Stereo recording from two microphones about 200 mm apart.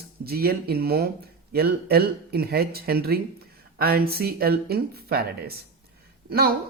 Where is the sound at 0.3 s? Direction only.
50° right (ahead or behind).